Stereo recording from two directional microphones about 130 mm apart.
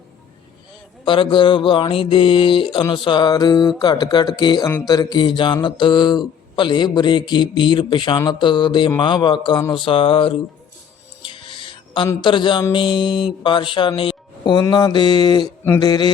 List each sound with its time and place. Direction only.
1.0 s speech: 40° left (ahead or behind)
9.7 s a sound: 40° left (ahead or behind)
11.2 s music: 40° left (ahead or behind)
12.2 s speech: 35° left (ahead or behind)